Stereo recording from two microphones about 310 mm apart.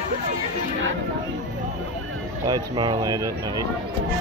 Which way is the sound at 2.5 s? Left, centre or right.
Centre.